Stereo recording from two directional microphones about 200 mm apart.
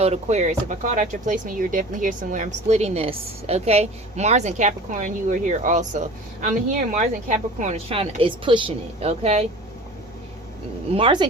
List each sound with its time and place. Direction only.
0.0 s speech: 35° right (ahead or behind)
10.9 s speech: 25° right (ahead or behind)